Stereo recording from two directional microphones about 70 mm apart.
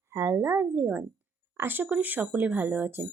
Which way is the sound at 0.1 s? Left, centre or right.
Right.